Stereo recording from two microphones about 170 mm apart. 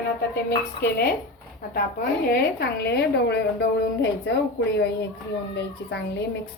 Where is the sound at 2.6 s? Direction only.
75° left (ahead or behind); by 4.4 s 90° left.